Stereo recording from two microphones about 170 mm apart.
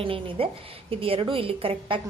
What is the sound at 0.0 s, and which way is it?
A woman's voice, 30° right (ahead or behind).